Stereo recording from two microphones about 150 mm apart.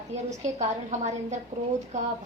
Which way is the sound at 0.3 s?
50° right (ahead or behind).